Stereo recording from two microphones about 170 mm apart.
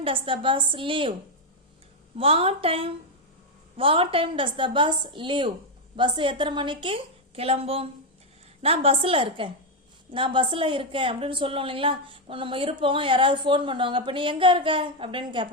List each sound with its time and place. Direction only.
0.0 s a woman's voice: 30° right (ahead or behind)
2.1 s a woman's voice: 35° right (ahead or behind)